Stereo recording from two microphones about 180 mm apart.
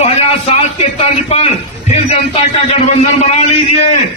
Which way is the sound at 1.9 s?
35° left (ahead or behind).